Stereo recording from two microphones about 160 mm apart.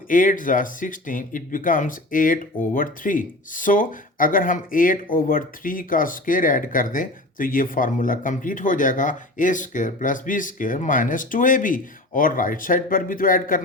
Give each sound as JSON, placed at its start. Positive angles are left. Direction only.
{"t": 0.1, "sound": "speech", "side_deg": 55}